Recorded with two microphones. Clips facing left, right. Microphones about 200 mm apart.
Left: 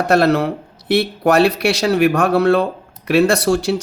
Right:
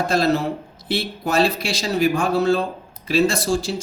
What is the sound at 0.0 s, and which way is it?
Speech, 65° left (ahead or behind).